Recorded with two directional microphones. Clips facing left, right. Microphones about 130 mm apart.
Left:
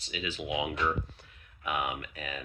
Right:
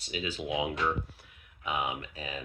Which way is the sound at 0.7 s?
10° right (ahead or behind).